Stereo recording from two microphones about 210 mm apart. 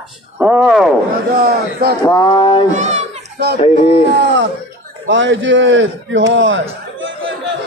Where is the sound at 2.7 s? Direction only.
35° right (ahead or behind).